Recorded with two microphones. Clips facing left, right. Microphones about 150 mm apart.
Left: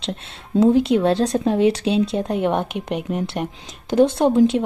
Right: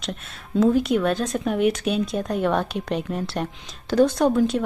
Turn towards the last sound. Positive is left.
turn(degrees=25)  # may be behind; listen again after turning